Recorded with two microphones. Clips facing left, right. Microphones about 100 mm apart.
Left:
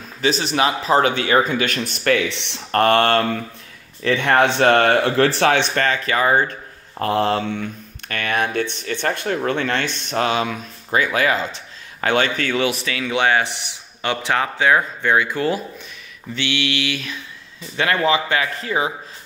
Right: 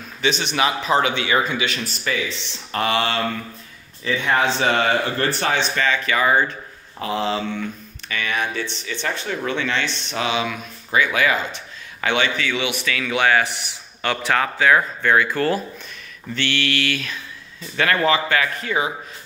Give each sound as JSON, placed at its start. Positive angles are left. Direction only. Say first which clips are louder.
{"t": 0.2, "sound": "speech", "louder": "left 2 dB", "side_deg": 35}
{"t": 1.9, "sound": "speech", "louder": "left 6 dB", "side_deg": 70}
{"t": 4.0, "sound": "speech", "louder": "left 4 dB", "side_deg": 65}
{"t": 5.9, "sound": "speech", "louder": "right 2 dB", "side_deg": 35}
{"t": 7.0, "sound": "a man's voice", "louder": "left 4 dB", "side_deg": 55}